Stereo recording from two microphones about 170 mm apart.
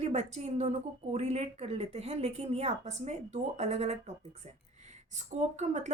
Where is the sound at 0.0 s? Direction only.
40° right (ahead or behind).